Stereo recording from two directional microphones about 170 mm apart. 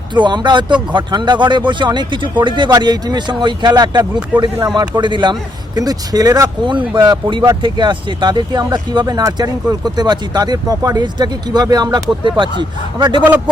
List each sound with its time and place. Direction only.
0.1 s speech: 25° right (ahead or behind)